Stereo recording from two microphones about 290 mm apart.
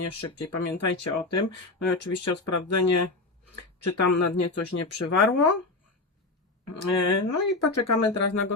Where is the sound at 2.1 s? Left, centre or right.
Left.